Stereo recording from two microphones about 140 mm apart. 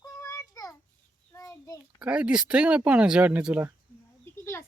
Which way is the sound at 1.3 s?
25° left (ahead or behind).